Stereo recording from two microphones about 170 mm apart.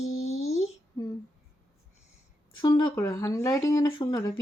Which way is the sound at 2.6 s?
25° left (ahead or behind).